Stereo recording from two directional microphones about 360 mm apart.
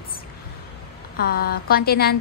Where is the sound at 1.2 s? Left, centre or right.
Left.